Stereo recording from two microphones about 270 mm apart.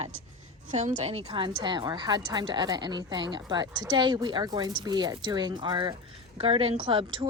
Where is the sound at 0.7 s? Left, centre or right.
Right.